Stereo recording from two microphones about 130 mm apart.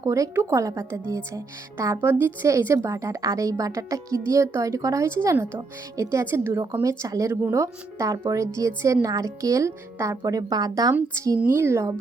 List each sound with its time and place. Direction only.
0.0 s speech: 25° right (ahead or behind)